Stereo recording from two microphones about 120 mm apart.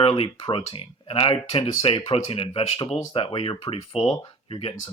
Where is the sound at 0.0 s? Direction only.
50° left (ahead or behind).